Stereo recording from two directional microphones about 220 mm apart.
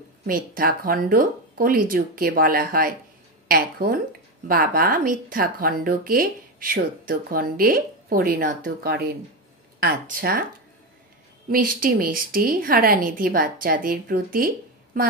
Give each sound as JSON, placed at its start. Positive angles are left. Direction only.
{"t": 0.3, "sound": "speech", "side_deg": -40}
{"t": 3.4, "sound": "a sound", "side_deg": -40}
{"t": 4.5, "sound": "speech", "side_deg": -40}
{"t": 11.4, "sound": "speech", "side_deg": -40}